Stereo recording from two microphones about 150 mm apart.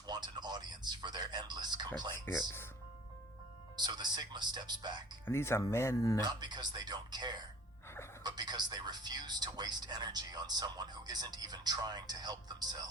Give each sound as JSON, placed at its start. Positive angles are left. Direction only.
{"t": 0.1, "sound": "speech", "side_deg": -30}
{"t": 2.1, "sound": "speech", "side_deg": 15}
{"t": 3.8, "sound": "speech", "side_deg": -30}
{"t": 5.2, "sound": "speech", "side_deg": 15}
{"t": 6.2, "sound": "speech", "side_deg": -30}